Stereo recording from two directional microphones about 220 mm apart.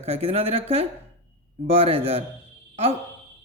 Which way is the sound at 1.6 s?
30° right (ahead or behind).